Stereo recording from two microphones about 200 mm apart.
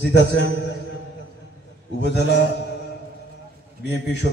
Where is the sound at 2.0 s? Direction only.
60° left (ahead or behind).